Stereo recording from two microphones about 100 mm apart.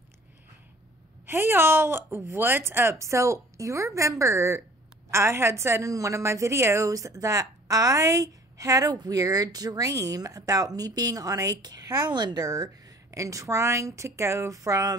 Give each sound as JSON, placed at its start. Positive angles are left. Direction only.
{"t": 1.2, "sound": "a woman's voice", "side_deg": -25}